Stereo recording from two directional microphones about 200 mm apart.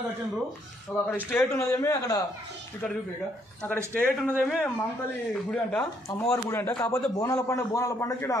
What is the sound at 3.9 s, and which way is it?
Speech, 10° left (ahead or behind).